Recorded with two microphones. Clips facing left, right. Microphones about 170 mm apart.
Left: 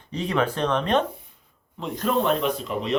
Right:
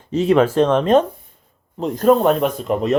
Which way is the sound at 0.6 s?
45° right (ahead or behind).